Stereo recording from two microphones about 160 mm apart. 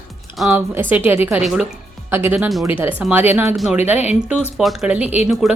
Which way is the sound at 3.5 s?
Centre (ahead or behind).